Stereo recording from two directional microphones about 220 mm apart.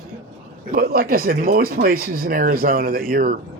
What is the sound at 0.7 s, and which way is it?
Speech, 40° right (ahead or behind).